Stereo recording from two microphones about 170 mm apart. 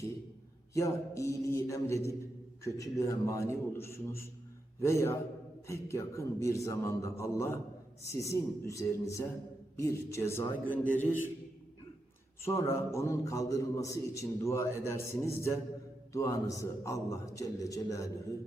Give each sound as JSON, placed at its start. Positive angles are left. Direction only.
{"t": 0.7, "sound": "a man's voice", "side_deg": 20}
{"t": 12.4, "sound": "a man's voice", "side_deg": 15}